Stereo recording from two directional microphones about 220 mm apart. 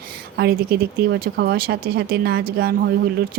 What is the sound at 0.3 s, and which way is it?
Speech, 45° right (ahead or behind).